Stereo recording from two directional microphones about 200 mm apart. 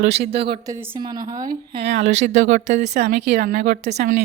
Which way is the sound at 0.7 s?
20° right (ahead or behind).